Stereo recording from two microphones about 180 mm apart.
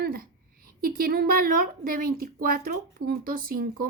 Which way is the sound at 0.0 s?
55° right (ahead or behind).